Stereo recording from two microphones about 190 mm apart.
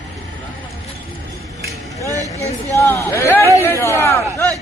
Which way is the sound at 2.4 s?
15° left (ahead or behind).